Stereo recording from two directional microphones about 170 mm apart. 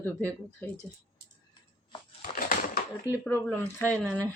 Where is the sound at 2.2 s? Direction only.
55° left (ahead or behind).